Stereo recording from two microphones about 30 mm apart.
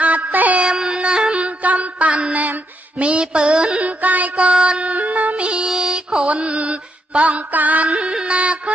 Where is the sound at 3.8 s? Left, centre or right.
Right.